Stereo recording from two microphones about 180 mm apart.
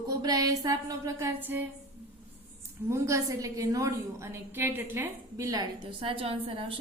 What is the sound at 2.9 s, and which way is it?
A woman's voice, 15° right (ahead or behind).